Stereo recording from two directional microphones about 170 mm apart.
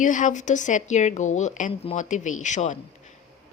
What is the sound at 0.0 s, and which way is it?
A woman's voice, 50° left (ahead or behind).